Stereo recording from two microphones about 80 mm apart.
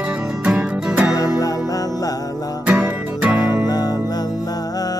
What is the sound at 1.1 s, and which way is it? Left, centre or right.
Music, left.